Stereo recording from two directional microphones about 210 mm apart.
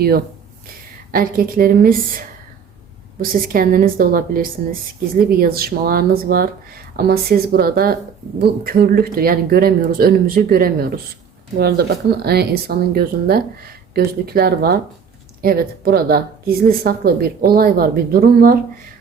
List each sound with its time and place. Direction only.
1.1 s a woman's voice: 45° right (ahead or behind)